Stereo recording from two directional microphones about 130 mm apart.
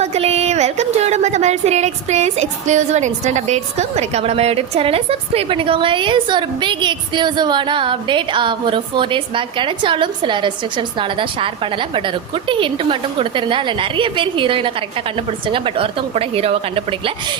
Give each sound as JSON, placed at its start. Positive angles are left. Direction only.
{"t": 0.0, "sound": "speech", "side_deg": -55}